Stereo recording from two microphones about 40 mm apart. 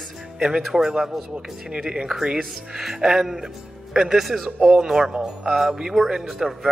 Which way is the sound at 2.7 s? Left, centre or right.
Centre.